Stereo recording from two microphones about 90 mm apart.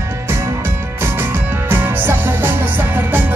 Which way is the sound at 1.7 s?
20° right (ahead or behind).